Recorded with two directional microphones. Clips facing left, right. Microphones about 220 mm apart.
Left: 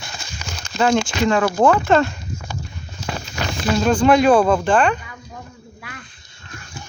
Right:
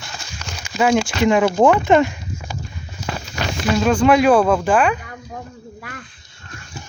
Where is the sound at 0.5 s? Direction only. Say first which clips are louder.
Right 1 dB; 5° right (ahead or behind).